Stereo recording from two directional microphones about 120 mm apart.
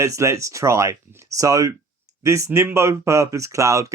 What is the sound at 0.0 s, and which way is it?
Speech, 25° right (ahead or behind).